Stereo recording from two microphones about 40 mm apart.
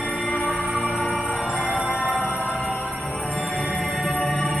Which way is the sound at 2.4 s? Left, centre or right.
Left.